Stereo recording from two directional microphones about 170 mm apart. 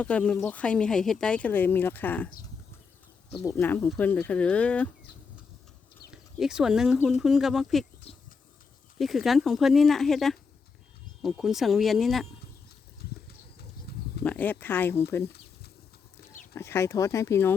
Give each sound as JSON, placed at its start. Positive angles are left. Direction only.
{"t": 0.0, "sound": "speech", "side_deg": 5}
{"t": 3.5, "sound": "speech", "side_deg": 10}
{"t": 6.1, "sound": "speech", "side_deg": -5}
{"t": 9.0, "sound": "speech", "side_deg": 0}
{"t": 13.6, "sound": "pigeon", "side_deg": 70}
{"t": 14.3, "sound": "speech", "side_deg": 10}
{"t": 16.3, "sound": "speech", "side_deg": 15}